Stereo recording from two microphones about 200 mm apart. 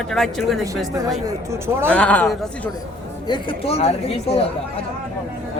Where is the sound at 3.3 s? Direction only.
25° left (ahead or behind).